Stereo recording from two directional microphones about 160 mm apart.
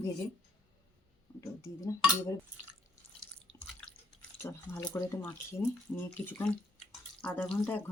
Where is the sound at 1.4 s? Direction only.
15° left (ahead or behind).